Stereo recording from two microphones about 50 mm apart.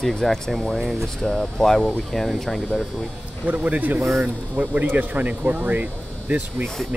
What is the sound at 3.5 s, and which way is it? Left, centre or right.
Speech, right.